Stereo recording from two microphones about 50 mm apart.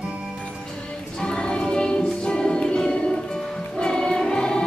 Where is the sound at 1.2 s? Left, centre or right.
Centre.